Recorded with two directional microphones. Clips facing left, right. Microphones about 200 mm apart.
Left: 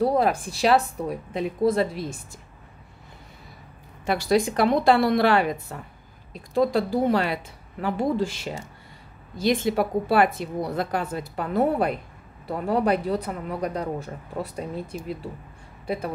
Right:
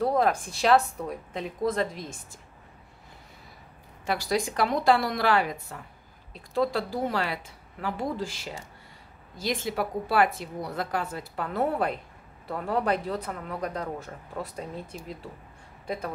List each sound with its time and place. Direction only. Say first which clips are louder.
0.0 s a woman's voice: left 3 dB; 10° left (ahead or behind)
4.0 s a woman's voice: left 6 dB; 25° left (ahead or behind)